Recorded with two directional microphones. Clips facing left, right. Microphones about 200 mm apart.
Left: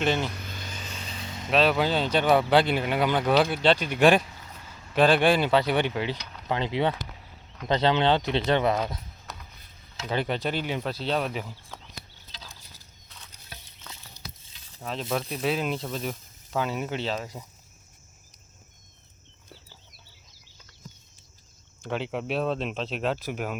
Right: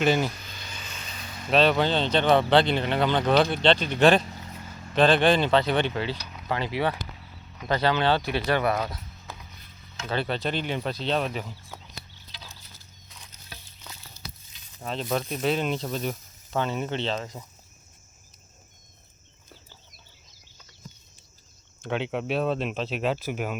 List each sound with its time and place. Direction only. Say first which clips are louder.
0.0 s speech: right 3 dB; 5° right (ahead or behind)
0.3 s vehicle: left 4 dB; 55° left (ahead or behind); by 1.5 s 25° left (ahead or behind)
1.5 s speech: right 1 dB; centre (ahead or behind); by 8.8 s 20° left (ahead or behind)
10.1 s speech: even; 15° left (ahead or behind)
11.7 s chicken: right 1 dB; 10° right (ahead or behind)
14.2 s stir: right 1 dB; 15° left (ahead or behind)
14.8 s speech: right 1 dB; centre (ahead or behind)
21.8 s speech: right 2 dB; centre (ahead or behind)